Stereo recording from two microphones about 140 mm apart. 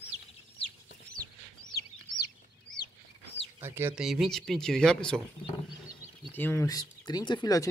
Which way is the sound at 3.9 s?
Centre (ahead or behind).